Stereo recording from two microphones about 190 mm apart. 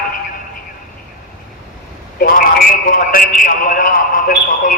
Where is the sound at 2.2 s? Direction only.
50° left (ahead or behind).